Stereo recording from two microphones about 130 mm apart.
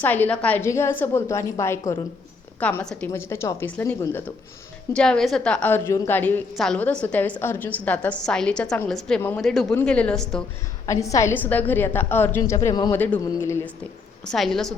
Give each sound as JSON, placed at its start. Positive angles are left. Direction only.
{"t": 0.0, "sound": "a woman's voice", "side_deg": 15}
{"t": 3.1, "sound": "a woman's voice", "side_deg": 20}
{"t": 4.9, "sound": "a woman's voice", "side_deg": 5}
{"t": 10.8, "sound": "a woman's voice", "side_deg": 25}
{"t": 14.3, "sound": "a woman's voice", "side_deg": 0}